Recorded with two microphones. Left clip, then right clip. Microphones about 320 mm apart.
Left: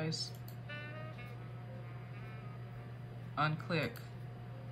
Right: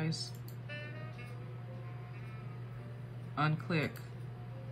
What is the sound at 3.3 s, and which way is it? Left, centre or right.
Speech, centre.